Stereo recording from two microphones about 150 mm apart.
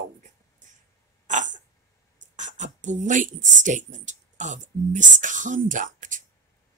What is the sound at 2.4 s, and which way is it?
Speech, 55° right (ahead or behind).